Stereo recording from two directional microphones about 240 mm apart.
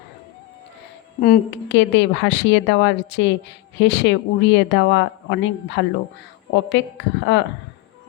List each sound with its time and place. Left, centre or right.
1.2 s a woman's voice: left